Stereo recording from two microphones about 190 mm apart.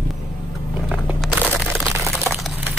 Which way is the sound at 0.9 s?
5° right (ahead or behind).